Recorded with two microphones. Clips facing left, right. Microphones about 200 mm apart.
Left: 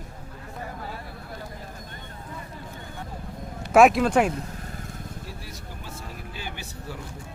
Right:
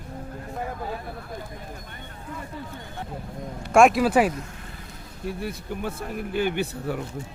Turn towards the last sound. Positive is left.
turn(degrees=-60)  # may be behind; listen again after turning